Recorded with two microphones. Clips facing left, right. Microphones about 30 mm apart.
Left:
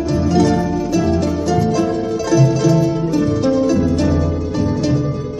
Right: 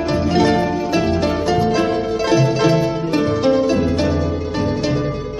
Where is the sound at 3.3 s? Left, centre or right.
Right.